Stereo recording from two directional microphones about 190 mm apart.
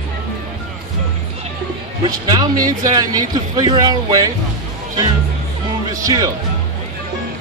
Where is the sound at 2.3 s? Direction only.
20° right (ahead or behind).